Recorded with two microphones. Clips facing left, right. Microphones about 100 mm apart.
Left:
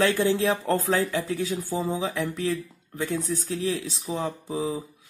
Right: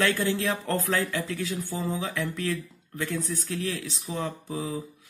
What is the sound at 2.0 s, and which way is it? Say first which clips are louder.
Speech: left 3 dB; 35° left (ahead or behind).